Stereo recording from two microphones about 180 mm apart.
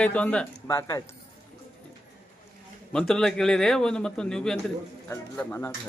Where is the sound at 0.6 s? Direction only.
20° left (ahead or behind).